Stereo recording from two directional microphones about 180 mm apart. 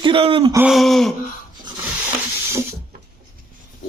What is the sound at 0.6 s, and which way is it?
Gasp, centre (ahead or behind).